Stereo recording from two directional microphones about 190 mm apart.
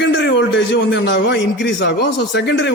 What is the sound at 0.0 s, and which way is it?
A man's voice, 70° left (ahead or behind).